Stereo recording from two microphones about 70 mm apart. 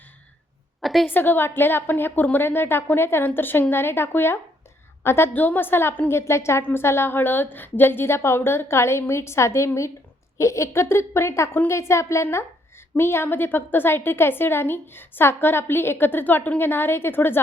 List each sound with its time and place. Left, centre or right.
0.8 s a sound: centre
1.0 s a woman's voice: left
5.3 s a woman's voice: left